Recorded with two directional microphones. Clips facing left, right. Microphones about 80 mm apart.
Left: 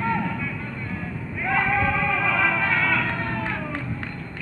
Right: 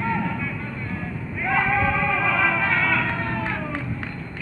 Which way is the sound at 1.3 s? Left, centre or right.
Centre.